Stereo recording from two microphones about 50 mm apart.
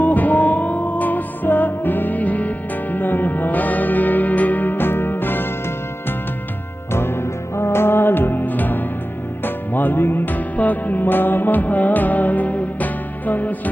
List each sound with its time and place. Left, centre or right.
0.0 s music: left
6.9 s music: left